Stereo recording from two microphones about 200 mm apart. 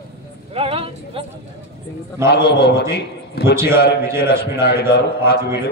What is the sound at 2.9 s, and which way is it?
Speech, 60° left (ahead or behind).